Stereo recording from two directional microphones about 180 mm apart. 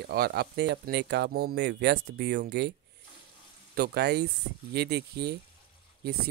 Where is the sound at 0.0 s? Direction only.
60° right (ahead or behind).